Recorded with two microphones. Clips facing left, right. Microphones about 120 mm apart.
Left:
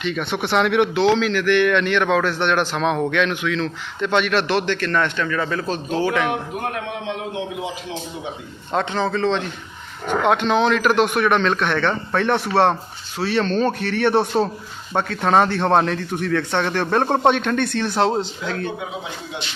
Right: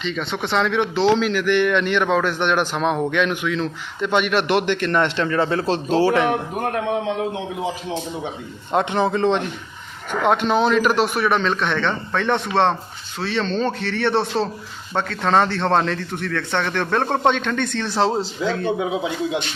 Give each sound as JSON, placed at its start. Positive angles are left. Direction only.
{"t": 0.0, "sound": "a man's voice", "side_deg": 5}
{"t": 1.2, "sound": "a man's voice", "side_deg": -10}
{"t": 8.7, "sound": "a man's voice", "side_deg": -15}
{"t": 10.2, "sound": "a man's voice", "side_deg": -5}